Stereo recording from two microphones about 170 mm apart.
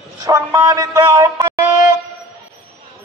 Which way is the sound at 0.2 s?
20° right (ahead or behind).